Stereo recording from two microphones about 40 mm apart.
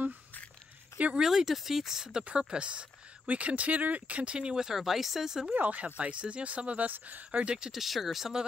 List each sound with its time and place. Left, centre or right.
1.1 s speech: centre
2.2 s speech: right
4.7 s speech: centre
5.5 s speech: right
5.9 s speech: right
6.9 s speech: right
7.3 s speech: right
7.7 s speech: centre